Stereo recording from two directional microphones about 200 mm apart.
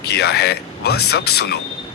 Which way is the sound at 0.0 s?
55° left (ahead or behind).